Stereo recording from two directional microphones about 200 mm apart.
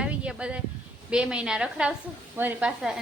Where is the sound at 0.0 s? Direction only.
5° right (ahead or behind).